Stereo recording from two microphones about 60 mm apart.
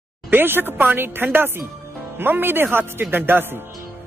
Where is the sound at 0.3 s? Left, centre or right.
Right.